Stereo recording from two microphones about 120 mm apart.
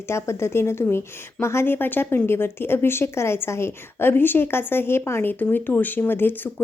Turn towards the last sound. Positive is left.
turn(degrees=15)  # may be behind; listen again after turning